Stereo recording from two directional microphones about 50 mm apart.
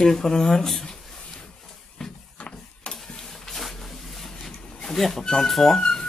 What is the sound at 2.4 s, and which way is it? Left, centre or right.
Ratchet, left.